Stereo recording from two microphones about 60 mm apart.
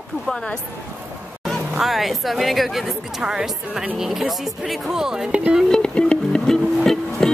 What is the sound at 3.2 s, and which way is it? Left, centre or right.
Speech, centre.